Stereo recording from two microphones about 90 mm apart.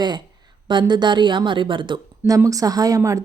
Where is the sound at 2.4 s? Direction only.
40° right (ahead or behind).